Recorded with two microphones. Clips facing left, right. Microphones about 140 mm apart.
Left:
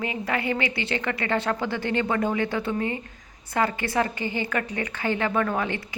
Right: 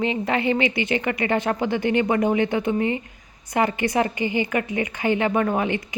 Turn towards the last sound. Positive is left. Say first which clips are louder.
# right 4 dB
turn(degrees=-15)  # may be behind; listen again after turning